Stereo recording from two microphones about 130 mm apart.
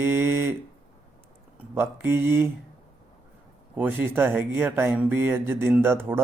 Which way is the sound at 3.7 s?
15° right (ahead or behind).